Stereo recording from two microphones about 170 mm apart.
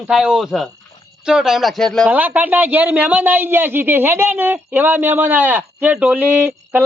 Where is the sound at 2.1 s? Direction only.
10° right (ahead or behind).